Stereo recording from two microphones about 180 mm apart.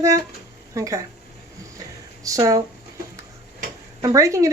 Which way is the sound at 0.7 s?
15° right (ahead or behind).